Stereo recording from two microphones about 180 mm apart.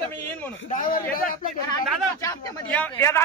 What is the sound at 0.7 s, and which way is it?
Speech, 50° left (ahead or behind).